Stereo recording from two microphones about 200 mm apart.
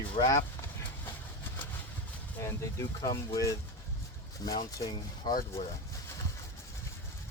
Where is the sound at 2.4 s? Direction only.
15° left (ahead or behind).